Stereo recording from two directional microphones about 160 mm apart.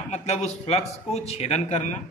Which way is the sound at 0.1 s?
45° left (ahead or behind).